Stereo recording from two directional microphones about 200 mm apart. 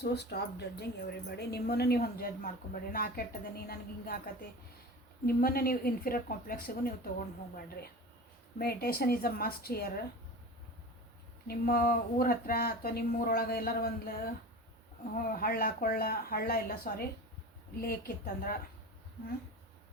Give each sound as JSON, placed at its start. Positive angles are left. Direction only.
{"t": 0.0, "sound": "speech", "side_deg": 55}
{"t": 5.2, "sound": "speech", "side_deg": 50}
{"t": 8.5, "sound": "speech", "side_deg": 50}
{"t": 11.4, "sound": "speech", "side_deg": 50}